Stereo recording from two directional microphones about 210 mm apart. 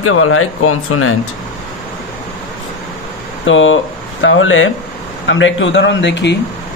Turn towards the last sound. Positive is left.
turn(degrees=55)  # may be behind; listen again after turning